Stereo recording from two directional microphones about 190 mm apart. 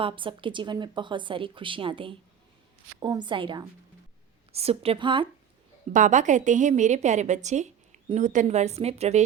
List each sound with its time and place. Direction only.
0.0 s a woman's voice: 25° right (ahead or behind)
5.9 s a woman's voice: 40° right (ahead or behind)